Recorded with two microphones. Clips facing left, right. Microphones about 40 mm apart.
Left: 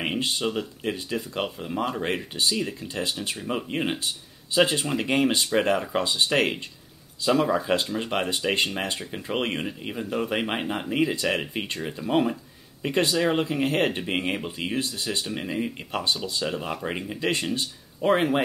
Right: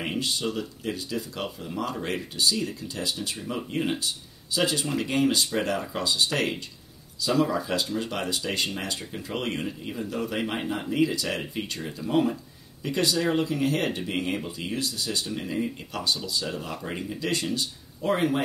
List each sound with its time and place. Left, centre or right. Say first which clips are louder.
0.2 s speech: left 2 dB; left